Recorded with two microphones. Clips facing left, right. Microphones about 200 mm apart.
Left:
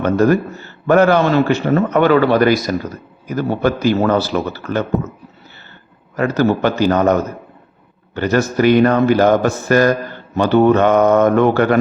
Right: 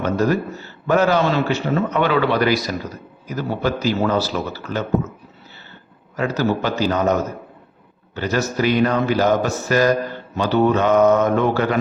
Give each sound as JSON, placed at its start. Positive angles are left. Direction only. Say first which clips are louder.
{"t": 0.0, "sound": "a man's voice", "louder": "left 5 dB", "side_deg": 55}
{"t": 6.1, "sound": "speech", "louder": "left 5 dB", "side_deg": 55}
{"t": 8.1, "sound": "speech", "louder": "left 5 dB", "side_deg": 55}